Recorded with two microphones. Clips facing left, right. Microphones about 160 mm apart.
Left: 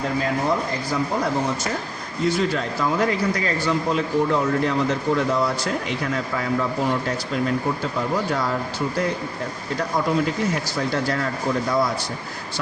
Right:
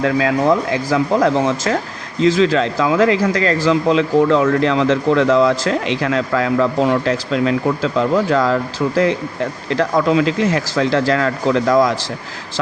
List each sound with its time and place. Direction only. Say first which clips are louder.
0.0 s speech: right 7 dB; 90° right
9.6 s speech: right 7 dB; 90° right